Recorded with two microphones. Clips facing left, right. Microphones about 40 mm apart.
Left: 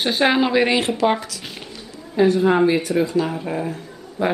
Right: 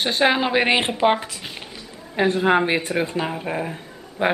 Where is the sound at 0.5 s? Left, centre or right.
Right.